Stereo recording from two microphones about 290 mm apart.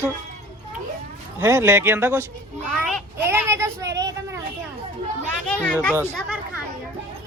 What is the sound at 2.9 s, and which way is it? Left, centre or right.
Child singing, centre.